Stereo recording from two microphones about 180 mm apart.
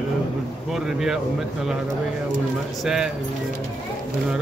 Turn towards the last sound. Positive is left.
turn(degrees=0)  # may be behind; listen again after turning